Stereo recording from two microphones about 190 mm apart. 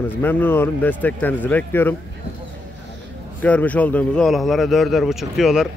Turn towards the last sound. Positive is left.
turn(degrees=0)  # may be behind; listen again after turning